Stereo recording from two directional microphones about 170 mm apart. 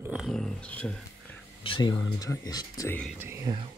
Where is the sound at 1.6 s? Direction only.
30° left (ahead or behind).